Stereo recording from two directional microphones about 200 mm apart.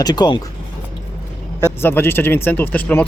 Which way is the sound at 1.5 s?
10° left (ahead or behind).